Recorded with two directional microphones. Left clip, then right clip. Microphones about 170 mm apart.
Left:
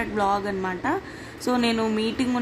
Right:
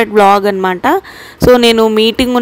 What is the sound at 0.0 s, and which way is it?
Speech, 55° right (ahead or behind).